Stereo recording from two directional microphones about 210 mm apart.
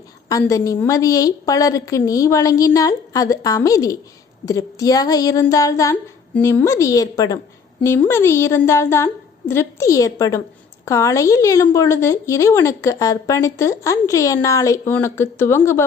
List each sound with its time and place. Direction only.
0.3 s a woman's voice: 15° left (ahead or behind)